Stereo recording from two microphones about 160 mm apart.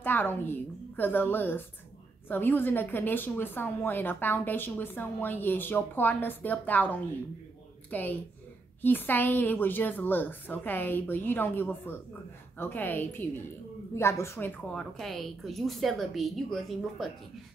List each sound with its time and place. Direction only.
0.0 s a woman's voice: 10° left (ahead or behind)
14.7 s a woman's voice: centre (ahead or behind)